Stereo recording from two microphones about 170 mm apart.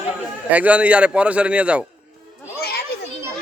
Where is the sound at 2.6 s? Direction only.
65° left (ahead or behind).